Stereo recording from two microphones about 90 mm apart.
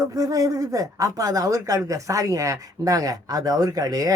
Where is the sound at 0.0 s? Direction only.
40° right (ahead or behind).